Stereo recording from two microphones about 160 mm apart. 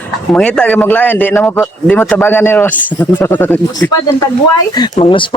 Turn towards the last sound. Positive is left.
turn(degrees=30)  # may be behind; listen again after turning